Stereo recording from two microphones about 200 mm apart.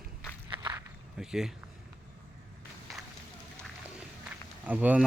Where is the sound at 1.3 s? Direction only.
Centre (ahead or behind).